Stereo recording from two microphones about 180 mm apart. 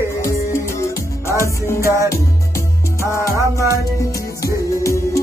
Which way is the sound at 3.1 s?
15° right (ahead or behind).